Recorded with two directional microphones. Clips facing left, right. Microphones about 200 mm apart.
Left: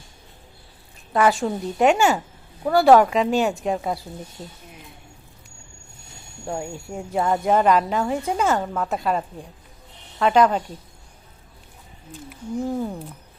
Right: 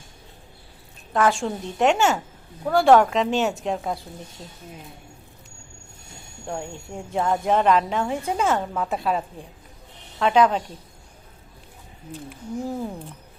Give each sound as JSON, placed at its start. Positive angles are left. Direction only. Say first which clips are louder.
{"t": 1.1, "sound": "a woman's voice", "louder": "left 2 dB", "side_deg": 5}
{"t": 6.5, "sound": "a woman's voice", "louder": "left 2 dB", "side_deg": 5}
{"t": 12.3, "sound": "a woman's voice", "louder": "left 4 dB", "side_deg": 0}